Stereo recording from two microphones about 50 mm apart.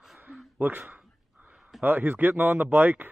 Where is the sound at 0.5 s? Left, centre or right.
Right.